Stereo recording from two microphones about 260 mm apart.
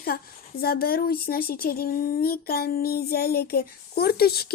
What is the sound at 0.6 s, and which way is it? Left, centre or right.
Speech, left.